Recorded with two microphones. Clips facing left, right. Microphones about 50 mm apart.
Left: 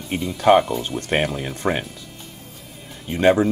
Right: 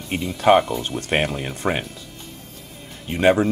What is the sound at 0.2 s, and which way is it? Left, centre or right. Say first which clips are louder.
Speech: left 1 dB; centre.